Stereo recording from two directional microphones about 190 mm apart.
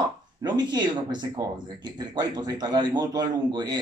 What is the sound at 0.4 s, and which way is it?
A man's voice, 20° right (ahead or behind).